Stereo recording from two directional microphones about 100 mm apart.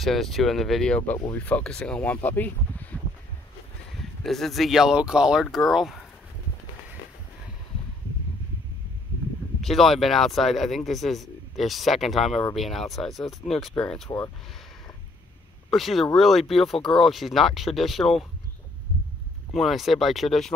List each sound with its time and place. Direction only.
0.0 s speech: centre (ahead or behind)
4.2 s speech: centre (ahead or behind)
9.6 s speech: centre (ahead or behind)
15.7 s speech: centre (ahead or behind)
19.5 s speech: centre (ahead or behind)